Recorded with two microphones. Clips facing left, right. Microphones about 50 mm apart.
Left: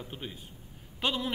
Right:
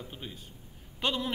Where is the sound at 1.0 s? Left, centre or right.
Centre.